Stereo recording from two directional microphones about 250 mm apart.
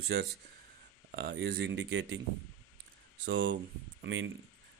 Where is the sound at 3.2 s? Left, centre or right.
Right.